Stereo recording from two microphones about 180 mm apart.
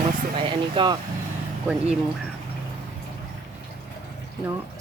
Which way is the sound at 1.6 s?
5° right (ahead or behind).